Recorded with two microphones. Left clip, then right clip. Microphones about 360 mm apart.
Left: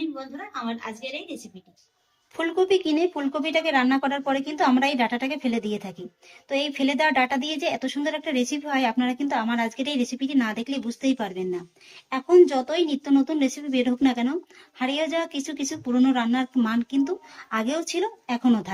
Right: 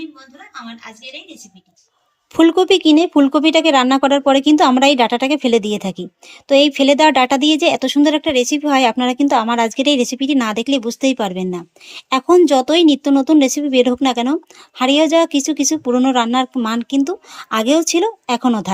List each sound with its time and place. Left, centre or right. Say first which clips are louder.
2.6 s speech: right 10 dB; centre